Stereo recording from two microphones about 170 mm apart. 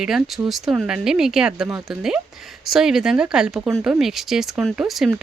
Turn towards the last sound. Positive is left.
turn(degrees=0)  # may be behind; listen again after turning